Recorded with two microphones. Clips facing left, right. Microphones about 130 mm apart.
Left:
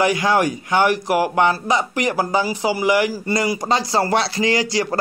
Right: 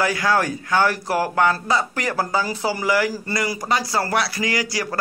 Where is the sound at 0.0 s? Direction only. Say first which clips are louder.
Left 3 dB; 20° left (ahead or behind).